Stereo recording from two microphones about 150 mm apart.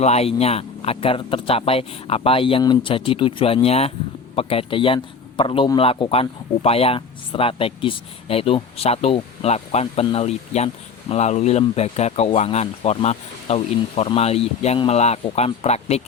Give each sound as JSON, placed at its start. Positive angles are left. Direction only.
{"t": 0.0, "sound": "speech", "side_deg": 45}